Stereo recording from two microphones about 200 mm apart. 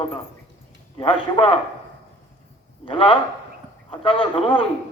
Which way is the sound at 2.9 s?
25° left (ahead or behind).